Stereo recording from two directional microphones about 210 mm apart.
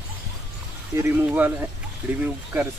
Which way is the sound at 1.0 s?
10° right (ahead or behind).